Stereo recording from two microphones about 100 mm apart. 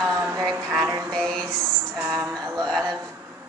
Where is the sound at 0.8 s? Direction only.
30° right (ahead or behind).